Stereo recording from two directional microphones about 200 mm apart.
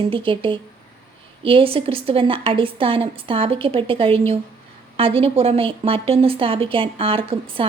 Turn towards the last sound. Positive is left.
turn(degrees=-25)  # may be behind; listen again after turning